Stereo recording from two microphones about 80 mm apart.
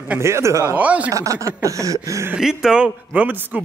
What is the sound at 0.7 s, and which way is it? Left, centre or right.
Speech, centre.